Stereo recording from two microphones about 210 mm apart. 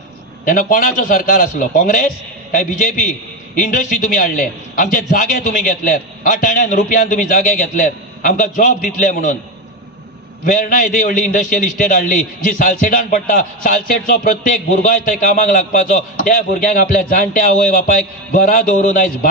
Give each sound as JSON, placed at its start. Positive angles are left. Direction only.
{"t": 0.4, "sound": "a man's voice", "side_deg": 40}
{"t": 10.4, "sound": "a man's voice", "side_deg": 40}